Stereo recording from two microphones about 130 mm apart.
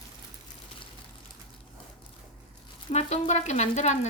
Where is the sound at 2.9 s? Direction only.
55° left (ahead or behind).